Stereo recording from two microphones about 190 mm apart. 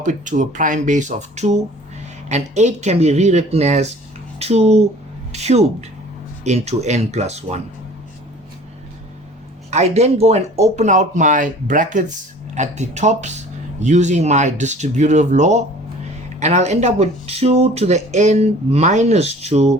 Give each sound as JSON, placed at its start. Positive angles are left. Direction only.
{"t": 0.0, "sound": "speech", "side_deg": -40}
{"t": 9.6, "sound": "speech", "side_deg": -35}